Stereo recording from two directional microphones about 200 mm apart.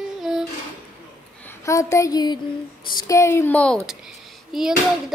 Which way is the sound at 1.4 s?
15° left (ahead or behind).